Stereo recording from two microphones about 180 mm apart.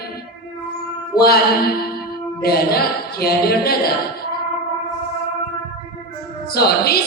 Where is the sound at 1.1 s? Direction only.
60° left (ahead or behind).